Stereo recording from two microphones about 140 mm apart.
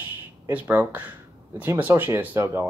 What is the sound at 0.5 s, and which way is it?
Speech, 10° right (ahead or behind).